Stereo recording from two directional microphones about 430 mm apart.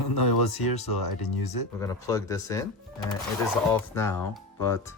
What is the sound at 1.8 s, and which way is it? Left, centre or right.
Speech, centre.